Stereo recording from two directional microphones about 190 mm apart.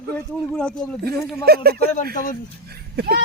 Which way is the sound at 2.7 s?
55° right (ahead or behind).